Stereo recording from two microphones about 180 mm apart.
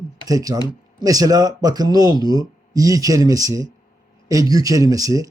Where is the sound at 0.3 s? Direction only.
20° right (ahead or behind).